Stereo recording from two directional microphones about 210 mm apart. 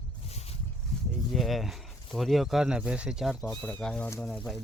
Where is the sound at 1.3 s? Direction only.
Centre (ahead or behind).